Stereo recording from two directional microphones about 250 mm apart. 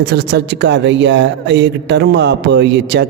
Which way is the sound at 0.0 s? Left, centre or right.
Right.